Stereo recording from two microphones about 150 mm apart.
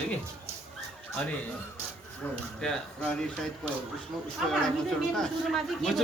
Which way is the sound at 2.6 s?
5° left (ahead or behind).